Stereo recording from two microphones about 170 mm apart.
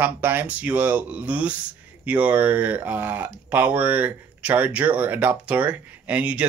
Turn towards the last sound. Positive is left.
turn(degrees=-10)  # may be behind; listen again after turning